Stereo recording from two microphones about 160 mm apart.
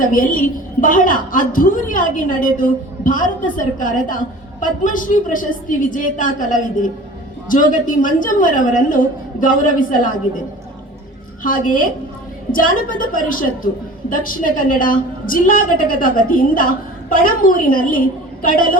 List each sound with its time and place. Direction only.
0.0 s a woman's voice: 60° left (ahead or behind)
11.4 s a woman's voice: 60° left (ahead or behind)